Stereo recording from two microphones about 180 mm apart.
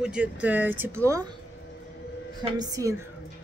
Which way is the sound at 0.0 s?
5° right (ahead or behind).